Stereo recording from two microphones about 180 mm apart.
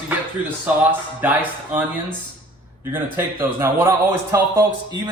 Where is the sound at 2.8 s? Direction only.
10° right (ahead or behind).